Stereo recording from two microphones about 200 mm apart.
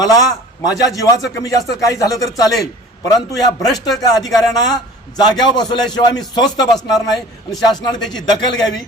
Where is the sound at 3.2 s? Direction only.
Centre (ahead or behind).